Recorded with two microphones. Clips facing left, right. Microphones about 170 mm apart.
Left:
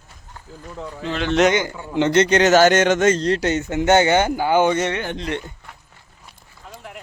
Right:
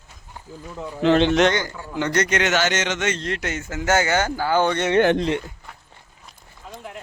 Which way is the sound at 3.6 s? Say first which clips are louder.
Left 4 dB; 20° left (ahead or behind).